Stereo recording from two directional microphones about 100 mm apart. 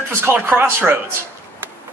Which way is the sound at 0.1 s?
25° right (ahead or behind).